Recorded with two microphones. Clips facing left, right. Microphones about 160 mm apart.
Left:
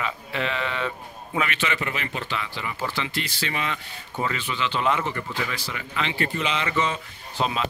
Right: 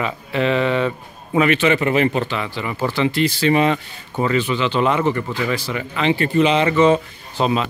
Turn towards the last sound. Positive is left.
turn(degrees=-25)  # may be behind; listen again after turning